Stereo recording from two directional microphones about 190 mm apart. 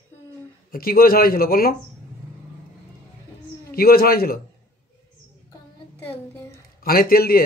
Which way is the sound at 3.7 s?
50° left (ahead or behind).